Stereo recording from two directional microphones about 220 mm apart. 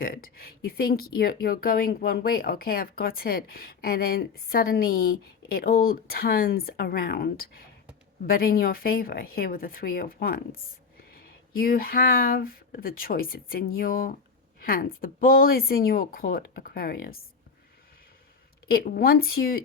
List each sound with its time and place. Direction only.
0.0 s a woman's voice: 40° left (ahead or behind)
18.7 s speech: 45° left (ahead or behind)